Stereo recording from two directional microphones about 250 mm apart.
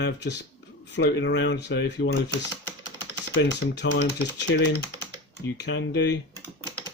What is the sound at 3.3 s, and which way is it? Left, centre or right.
Speech, left.